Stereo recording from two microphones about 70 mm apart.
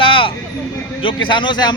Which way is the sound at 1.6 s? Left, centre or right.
Left.